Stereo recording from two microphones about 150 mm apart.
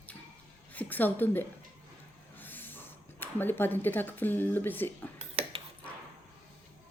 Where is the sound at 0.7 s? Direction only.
10° left (ahead or behind).